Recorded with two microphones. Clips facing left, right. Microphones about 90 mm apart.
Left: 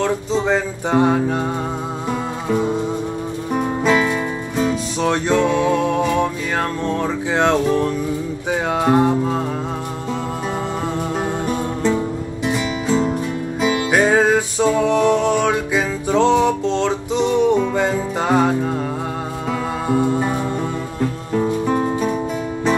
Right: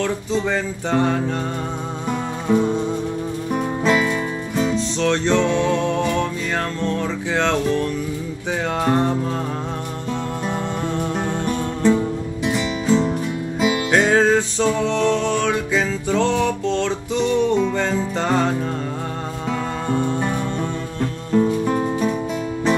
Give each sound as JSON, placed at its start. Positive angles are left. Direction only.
{"t": 0.0, "sound": "music", "side_deg": 20}
{"t": 2.5, "sound": "music", "side_deg": 5}
{"t": 11.4, "sound": "music", "side_deg": 5}
{"t": 13.8, "sound": "music", "side_deg": 10}
{"t": 19.9, "sound": "music", "side_deg": 5}